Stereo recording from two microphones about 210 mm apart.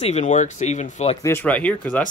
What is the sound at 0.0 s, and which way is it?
Speech, 35° left (ahead or behind).